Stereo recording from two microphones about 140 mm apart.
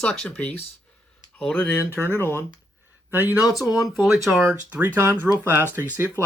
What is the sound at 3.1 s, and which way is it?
Speech, 15° right (ahead or behind).